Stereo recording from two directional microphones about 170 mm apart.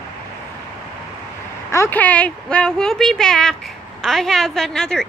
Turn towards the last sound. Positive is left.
turn(degrees=5)  # may be behind; listen again after turning